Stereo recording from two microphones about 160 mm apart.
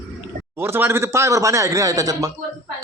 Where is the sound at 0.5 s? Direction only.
15° right (ahead or behind).